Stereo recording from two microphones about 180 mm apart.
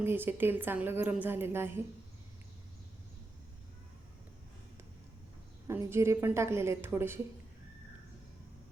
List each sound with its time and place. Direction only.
0.0 s a woman's voice: 10° right (ahead or behind)
5.6 s a woman's voice: 15° right (ahead or behind)